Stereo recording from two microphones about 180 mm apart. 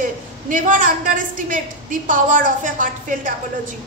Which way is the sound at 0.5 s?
50° right (ahead or behind).